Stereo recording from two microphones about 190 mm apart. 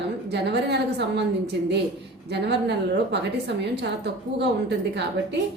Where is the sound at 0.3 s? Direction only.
60° right (ahead or behind).